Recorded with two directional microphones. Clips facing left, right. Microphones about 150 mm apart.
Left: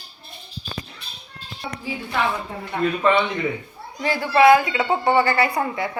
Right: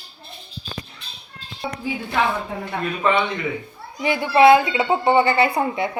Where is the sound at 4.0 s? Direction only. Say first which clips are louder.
Right 2 dB; 20° right (ahead or behind).